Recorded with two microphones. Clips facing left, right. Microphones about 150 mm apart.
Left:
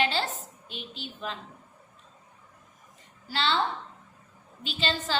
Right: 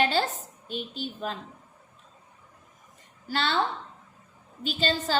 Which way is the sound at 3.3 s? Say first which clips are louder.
Even; 50° right (ahead or behind).